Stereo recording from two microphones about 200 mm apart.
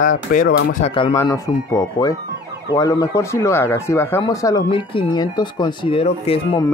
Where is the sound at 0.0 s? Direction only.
40° left (ahead or behind).